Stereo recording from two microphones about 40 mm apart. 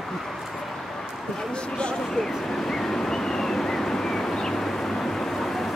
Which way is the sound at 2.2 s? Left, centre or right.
Centre.